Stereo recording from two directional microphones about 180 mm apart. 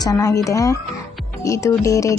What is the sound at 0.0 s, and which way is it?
Speech, 20° left (ahead or behind).